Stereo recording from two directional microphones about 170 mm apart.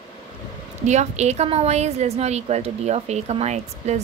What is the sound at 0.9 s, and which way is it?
A woman's voice, 40° right (ahead or behind).